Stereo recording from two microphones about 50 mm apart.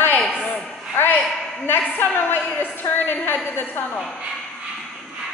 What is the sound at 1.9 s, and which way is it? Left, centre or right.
A woman's voice, left.